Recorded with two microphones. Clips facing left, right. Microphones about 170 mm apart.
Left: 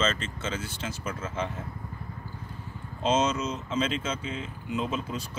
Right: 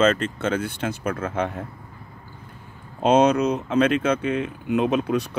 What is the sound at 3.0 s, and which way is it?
Speech, 60° right (ahead or behind).